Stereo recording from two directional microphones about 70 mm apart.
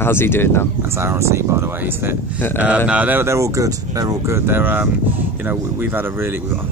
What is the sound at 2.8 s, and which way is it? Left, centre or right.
Speech, right.